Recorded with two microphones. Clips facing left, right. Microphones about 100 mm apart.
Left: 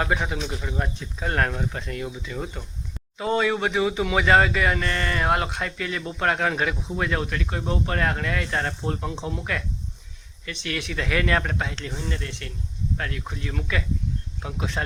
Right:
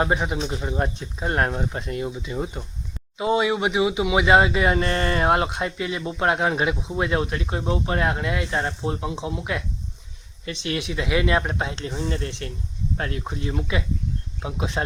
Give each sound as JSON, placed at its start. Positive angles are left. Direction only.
{"t": 0.0, "sound": "speech", "side_deg": -20}
{"t": 11.9, "sound": "speech", "side_deg": -35}